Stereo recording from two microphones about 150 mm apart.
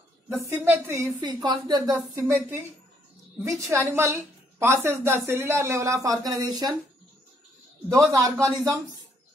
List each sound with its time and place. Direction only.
0.3 s a woman's voice: 15° right (ahead or behind)
7.9 s a woman's voice: 20° right (ahead or behind)